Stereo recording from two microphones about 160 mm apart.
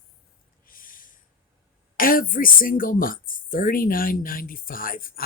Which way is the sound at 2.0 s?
60° left (ahead or behind).